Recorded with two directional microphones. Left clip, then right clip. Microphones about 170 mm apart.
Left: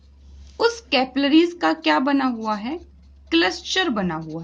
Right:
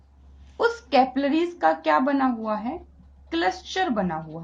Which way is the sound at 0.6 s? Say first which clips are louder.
Even; 30° left (ahead or behind).